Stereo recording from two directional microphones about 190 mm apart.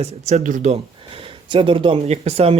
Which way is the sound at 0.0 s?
35° right (ahead or behind).